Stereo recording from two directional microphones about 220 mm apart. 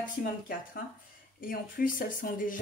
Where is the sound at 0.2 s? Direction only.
40° left (ahead or behind).